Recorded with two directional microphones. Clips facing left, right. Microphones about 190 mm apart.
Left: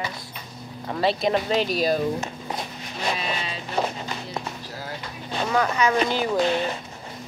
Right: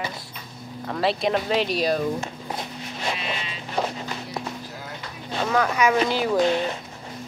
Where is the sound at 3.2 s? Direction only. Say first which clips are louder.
Left 2 dB; 40° left (ahead or behind).